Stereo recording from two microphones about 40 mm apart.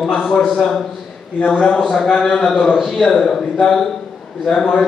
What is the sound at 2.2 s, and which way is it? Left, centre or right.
A man's voice, centre.